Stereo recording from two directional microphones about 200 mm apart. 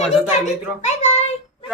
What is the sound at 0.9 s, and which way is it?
Child singing, 35° left (ahead or behind).